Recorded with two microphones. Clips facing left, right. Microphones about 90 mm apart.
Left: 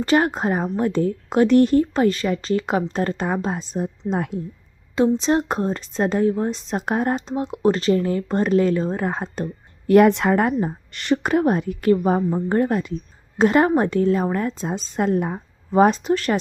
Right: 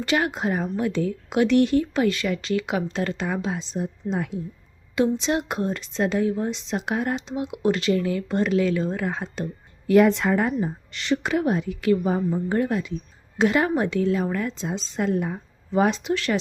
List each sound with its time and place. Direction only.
0.0 s a woman's voice: 40° left (ahead or behind)
4.9 s a woman's voice: 35° left (ahead or behind)